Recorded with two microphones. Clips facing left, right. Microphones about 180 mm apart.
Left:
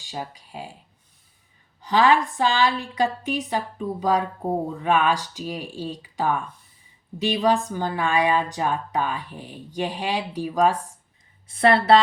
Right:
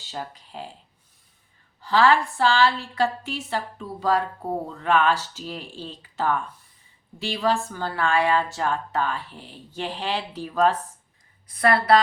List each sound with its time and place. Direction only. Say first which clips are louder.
0.0 s a woman's voice: left 1 dB; 10° left (ahead or behind)
1.8 s a woman's voice: left 1 dB; 15° left (ahead or behind)
11.4 s speech: left 2 dB; 25° left (ahead or behind)